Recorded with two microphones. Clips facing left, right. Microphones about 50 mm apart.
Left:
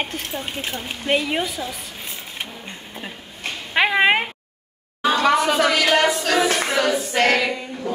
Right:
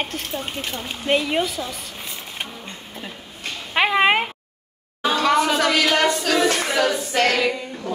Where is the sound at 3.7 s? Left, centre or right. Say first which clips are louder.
Even; centre.